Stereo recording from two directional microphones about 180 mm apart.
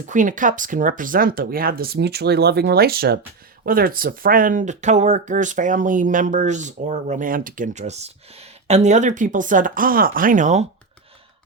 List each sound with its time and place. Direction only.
0.1 s speech: 45° right (ahead or behind)